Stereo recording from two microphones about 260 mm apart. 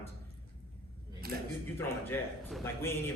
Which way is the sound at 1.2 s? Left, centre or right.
Right.